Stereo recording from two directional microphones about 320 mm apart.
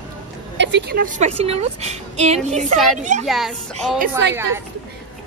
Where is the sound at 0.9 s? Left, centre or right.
Right.